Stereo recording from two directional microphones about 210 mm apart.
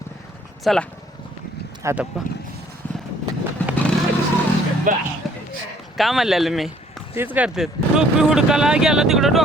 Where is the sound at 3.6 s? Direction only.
10° left (ahead or behind).